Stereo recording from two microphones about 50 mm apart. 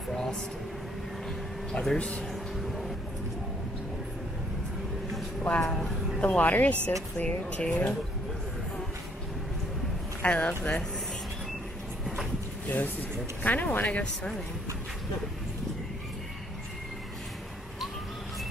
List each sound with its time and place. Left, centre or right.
0.1 s a sound: centre
1.7 s speech: centre
2.5 s vehicle: centre
5.6 s speech: centre
6.2 s speech: left
10.2 s speech: left
12.6 s speech: left